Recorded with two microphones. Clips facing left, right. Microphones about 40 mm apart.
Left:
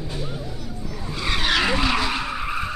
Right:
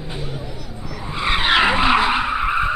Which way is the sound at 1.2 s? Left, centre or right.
Right.